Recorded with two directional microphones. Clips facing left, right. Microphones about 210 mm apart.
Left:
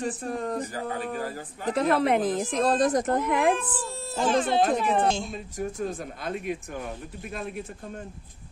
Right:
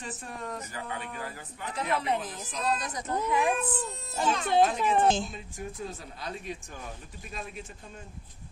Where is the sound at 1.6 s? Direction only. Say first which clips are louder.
Left 8 dB; 55° left (ahead or behind); by 2.7 s 90° left.